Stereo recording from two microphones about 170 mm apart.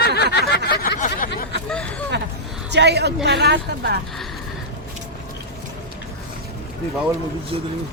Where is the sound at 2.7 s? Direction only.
85° right.